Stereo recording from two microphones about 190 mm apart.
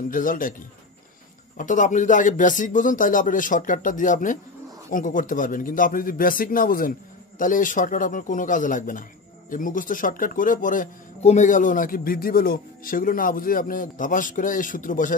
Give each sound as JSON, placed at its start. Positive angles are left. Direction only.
{"t": 0.1, "sound": "speech", "side_deg": 45}
{"t": 1.6, "sound": "speech", "side_deg": 40}